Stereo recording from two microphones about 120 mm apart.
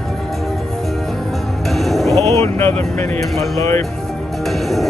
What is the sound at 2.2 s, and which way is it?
Speech, 20° left (ahead or behind).